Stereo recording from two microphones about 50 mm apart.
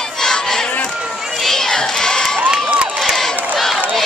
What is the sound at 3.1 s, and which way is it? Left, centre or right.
Crowd, centre.